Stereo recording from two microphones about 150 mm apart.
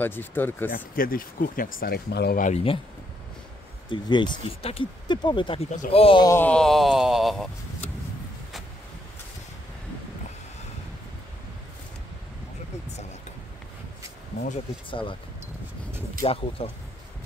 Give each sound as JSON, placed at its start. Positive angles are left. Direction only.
{"t": 0.0, "sound": "speech", "side_deg": 15}
{"t": 0.9, "sound": "speech", "side_deg": 70}
{"t": 2.5, "sound": "speech", "side_deg": 40}
{"t": 3.9, "sound": "speech", "side_deg": 30}
{"t": 6.2, "sound": "speech", "side_deg": 15}
{"t": 6.5, "sound": "speech", "side_deg": 0}
{"t": 14.9, "sound": "speech", "side_deg": 35}
{"t": 16.3, "sound": "speech", "side_deg": 40}